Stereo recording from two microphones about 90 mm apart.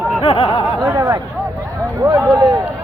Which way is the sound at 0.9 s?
30° right (ahead or behind).